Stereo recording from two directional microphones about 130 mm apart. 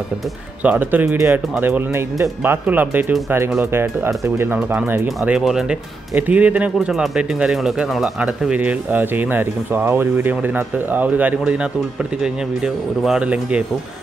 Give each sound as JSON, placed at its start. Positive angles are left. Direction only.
{"t": 0.7, "sound": "speech", "side_deg": -10}